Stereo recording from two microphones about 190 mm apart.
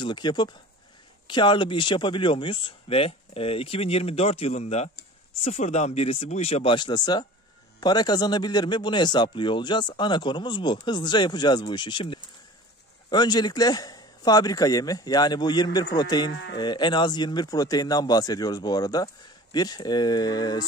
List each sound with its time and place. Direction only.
0.0 s speech: 25° left (ahead or behind)
16.3 s speech: 60° left (ahead or behind)
16.5 s speech: 25° left (ahead or behind)